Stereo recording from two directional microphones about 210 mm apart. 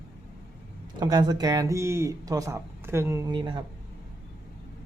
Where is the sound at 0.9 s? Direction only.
20° right (ahead or behind).